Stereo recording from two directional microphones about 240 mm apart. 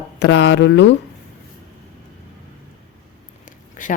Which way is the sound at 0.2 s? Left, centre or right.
Left.